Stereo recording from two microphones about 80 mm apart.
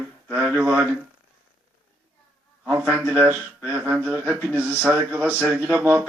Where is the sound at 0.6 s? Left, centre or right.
Right.